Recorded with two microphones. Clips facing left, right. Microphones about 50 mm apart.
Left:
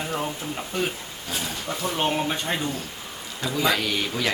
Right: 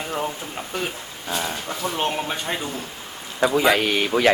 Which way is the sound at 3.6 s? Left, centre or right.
Right.